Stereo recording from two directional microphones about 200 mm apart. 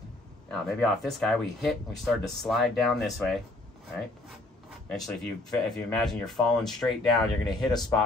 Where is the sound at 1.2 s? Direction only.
Centre (ahead or behind).